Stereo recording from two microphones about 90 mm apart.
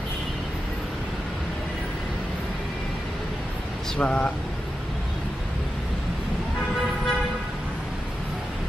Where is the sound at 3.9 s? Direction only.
15° left (ahead or behind).